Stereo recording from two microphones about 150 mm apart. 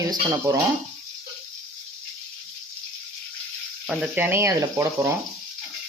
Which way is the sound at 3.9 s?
10° right (ahead or behind).